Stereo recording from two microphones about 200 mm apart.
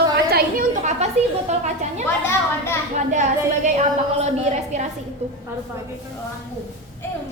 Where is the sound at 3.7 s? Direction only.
35° right (ahead or behind).